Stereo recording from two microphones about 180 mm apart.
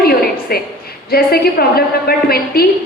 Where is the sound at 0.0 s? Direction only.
60° left (ahead or behind).